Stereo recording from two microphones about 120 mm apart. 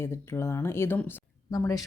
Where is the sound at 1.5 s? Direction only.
30° left (ahead or behind).